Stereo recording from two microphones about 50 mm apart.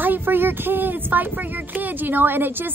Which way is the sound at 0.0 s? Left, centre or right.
Right.